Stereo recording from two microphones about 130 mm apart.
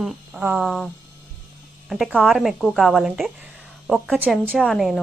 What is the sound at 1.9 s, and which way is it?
Speech, centre (ahead or behind).